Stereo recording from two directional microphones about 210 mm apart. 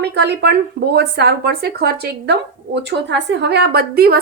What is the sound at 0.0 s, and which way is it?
A woman's voice, 55° right (ahead or behind).